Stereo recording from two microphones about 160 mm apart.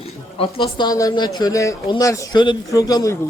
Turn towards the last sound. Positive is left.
turn(degrees=20)  # may be behind; listen again after turning